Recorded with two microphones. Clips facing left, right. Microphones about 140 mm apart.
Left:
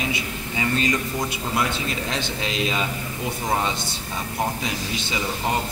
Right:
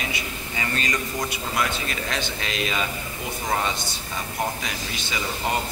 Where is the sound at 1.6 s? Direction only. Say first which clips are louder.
Left 1 dB; 25° left (ahead or behind).